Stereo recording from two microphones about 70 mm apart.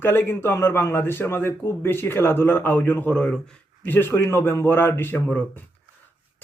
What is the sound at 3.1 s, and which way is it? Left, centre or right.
Speech, centre.